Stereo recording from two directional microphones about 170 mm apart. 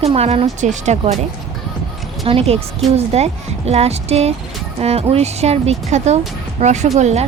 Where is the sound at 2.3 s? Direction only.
35° right (ahead or behind).